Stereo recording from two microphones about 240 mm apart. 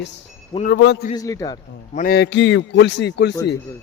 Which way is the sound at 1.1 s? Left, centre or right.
Centre.